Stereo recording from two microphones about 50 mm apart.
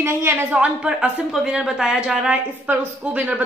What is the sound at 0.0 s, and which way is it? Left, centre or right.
Speech, right.